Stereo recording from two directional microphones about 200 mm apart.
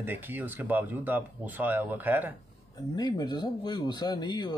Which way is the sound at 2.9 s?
20° left (ahead or behind).